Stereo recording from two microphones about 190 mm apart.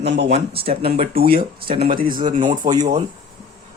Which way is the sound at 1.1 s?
50° right (ahead or behind).